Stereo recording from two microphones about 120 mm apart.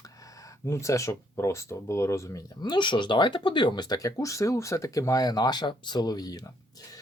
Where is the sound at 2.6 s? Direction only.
40° left (ahead or behind).